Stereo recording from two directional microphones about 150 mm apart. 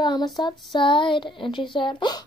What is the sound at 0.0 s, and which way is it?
Child singing, 30° left (ahead or behind).